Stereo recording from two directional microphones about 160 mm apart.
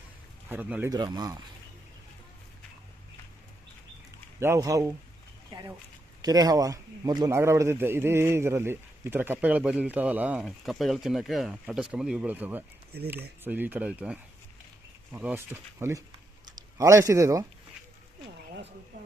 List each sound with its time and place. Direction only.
0.4 s speech: 10° right (ahead or behind)
0.9 s speech: 25° right (ahead or behind)
4.4 s a man's voice: 20° right (ahead or behind)
5.5 s a sound: 25° right (ahead or behind)
6.2 s a man's voice: 25° right (ahead or behind)
18.9 s a sound: 50° right (ahead or behind)